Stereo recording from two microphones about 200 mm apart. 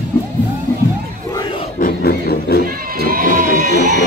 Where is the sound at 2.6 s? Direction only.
45° right (ahead or behind).